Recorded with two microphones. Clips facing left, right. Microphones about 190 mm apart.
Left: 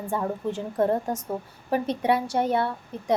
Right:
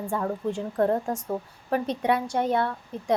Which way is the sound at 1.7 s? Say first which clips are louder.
Left 1 dB; 5° left (ahead or behind).